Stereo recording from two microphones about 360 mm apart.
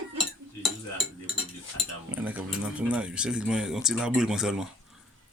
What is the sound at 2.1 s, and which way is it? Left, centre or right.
Speech, centre.